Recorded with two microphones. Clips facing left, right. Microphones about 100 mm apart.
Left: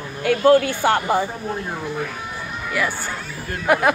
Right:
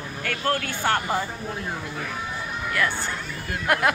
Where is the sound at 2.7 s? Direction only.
5° left (ahead or behind).